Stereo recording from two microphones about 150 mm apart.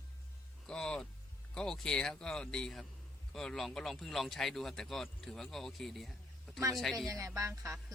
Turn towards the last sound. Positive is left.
turn(degrees=-20)  # may be behind; listen again after turning